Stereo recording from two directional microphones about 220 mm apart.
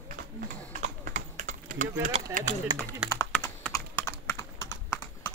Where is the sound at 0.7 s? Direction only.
40° right (ahead or behind).